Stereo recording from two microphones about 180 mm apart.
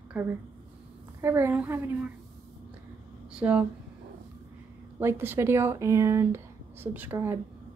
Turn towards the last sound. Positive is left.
turn(degrees=-10)  # may be behind; listen again after turning